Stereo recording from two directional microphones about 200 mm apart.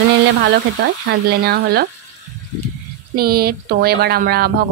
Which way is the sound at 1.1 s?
55° right (ahead or behind).